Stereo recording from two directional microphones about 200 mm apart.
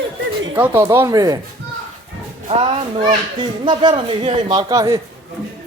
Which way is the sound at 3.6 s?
25° right (ahead or behind).